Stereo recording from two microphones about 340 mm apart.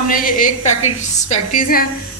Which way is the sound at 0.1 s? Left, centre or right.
Left.